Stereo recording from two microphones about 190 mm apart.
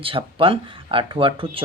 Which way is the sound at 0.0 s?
30° right (ahead or behind).